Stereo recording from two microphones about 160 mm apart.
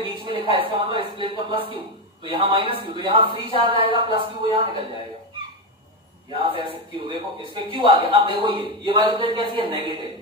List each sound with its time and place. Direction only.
0.0 s speech: 30° right (ahead or behind)
6.3 s speech: 35° right (ahead or behind)